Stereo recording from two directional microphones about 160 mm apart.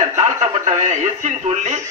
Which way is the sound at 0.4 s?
45° right (ahead or behind).